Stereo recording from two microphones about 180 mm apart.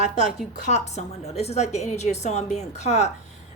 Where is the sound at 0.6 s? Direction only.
40° left (ahead or behind).